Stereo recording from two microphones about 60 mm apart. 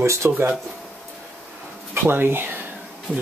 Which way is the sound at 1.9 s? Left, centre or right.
Right.